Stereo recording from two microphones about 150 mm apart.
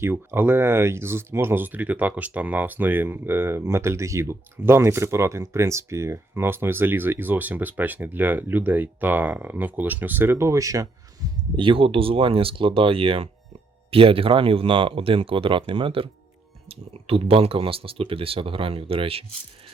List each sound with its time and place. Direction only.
0.0 s speech: 15° right (ahead or behind); by 19.2 s 40° right (ahead or behind)